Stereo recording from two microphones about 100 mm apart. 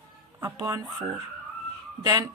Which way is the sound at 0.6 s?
35° right (ahead or behind).